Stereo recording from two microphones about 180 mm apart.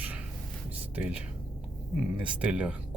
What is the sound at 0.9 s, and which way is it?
Speech, 5° right (ahead or behind).